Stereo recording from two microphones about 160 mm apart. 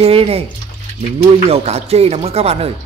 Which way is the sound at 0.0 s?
35° right (ahead or behind).